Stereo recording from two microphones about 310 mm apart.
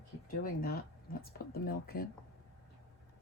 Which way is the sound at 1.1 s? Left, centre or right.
Left.